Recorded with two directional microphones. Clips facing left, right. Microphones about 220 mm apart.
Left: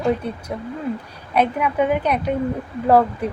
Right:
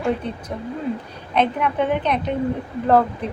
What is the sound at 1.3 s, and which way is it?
A woman's voice, 10° left (ahead or behind).